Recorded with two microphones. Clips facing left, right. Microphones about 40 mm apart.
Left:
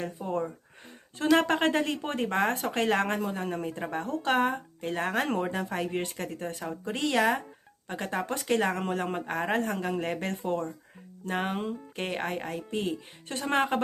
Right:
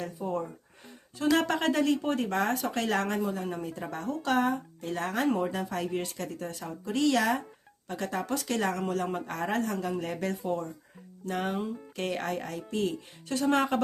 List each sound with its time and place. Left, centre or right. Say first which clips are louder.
0.0 s speech: left 1 dB; left
11.9 s speech: right 1 dB; left